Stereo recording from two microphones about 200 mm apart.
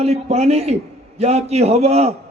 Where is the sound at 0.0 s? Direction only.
30° right (ahead or behind).